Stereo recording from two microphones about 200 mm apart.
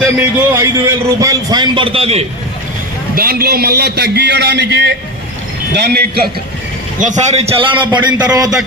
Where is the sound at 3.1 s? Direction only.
50° right (ahead or behind).